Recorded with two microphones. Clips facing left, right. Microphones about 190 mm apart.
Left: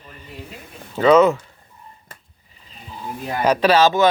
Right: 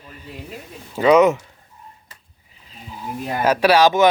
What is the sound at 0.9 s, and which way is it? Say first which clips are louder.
Speech: even; 10° right (ahead or behind).